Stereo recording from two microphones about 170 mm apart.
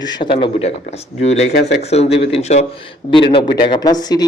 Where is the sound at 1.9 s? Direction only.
35° left (ahead or behind).